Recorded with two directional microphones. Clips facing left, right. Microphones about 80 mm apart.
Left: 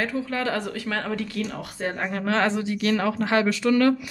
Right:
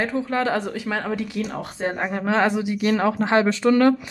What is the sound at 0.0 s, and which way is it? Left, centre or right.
Speech, right.